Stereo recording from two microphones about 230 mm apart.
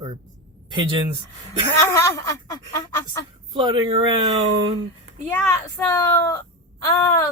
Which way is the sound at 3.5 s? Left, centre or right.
Right.